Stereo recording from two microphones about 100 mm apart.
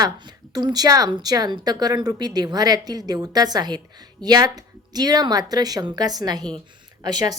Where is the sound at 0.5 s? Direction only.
40° right (ahead or behind).